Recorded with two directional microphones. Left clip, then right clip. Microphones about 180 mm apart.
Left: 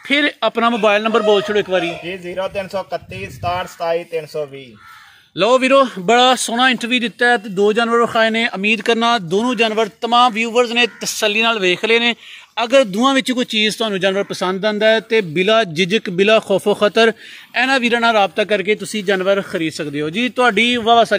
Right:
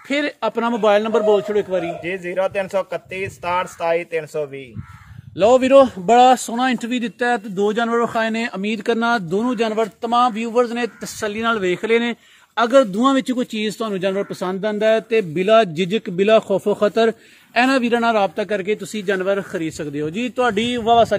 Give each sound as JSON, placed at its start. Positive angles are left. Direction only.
{"t": 0.1, "sound": "a man's voice", "side_deg": 40}
{"t": 2.0, "sound": "speech", "side_deg": -5}
{"t": 5.4, "sound": "a man's voice", "side_deg": 30}